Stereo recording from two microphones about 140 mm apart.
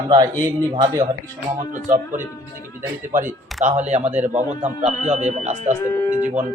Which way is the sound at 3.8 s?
55° right (ahead or behind).